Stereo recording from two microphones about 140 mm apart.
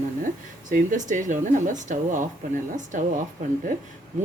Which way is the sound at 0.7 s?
70° right (ahead or behind).